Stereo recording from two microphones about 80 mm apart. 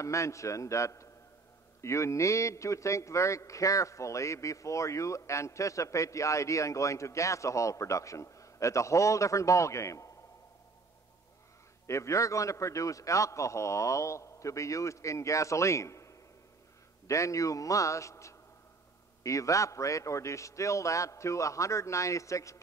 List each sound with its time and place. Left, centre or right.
0.0 s a man's voice: left
11.8 s a man's voice: left